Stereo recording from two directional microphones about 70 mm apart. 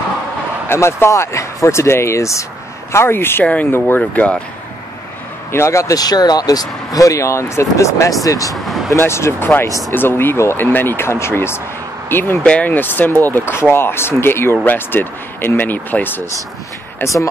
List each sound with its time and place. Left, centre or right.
0.7 s speech: left
2.9 s speech: left
4.0 s speech: centre
5.5 s speech: left
5.9 s speech: left
8.5 s vehicle: centre
9.0 s speech: left
12.4 s speech: left
17.0 s speech: left